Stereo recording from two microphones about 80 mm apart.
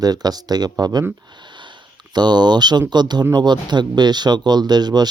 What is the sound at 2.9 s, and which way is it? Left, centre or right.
Speech, right.